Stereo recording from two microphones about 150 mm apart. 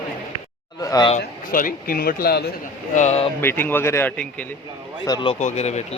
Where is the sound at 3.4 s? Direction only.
15° left (ahead or behind).